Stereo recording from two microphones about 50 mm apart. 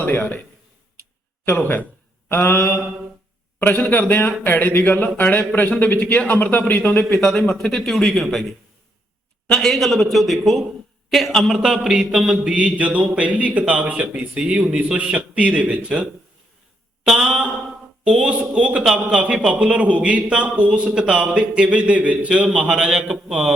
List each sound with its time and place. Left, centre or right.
0.0 s a man's voice: left
1.5 s a man's voice: left
2.3 s mantra: left
3.6 s a man's voice: left
7.1 s speech: centre
9.5 s a sound: centre
12.5 s speech: right
17.2 s a man's voice: right